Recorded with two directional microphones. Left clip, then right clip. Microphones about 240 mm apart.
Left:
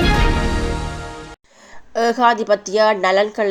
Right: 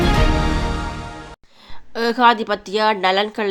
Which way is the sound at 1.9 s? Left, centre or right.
Right.